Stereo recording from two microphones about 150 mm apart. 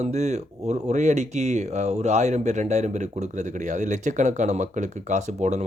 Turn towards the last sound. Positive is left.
turn(degrees=-50)  # may be behind; listen again after turning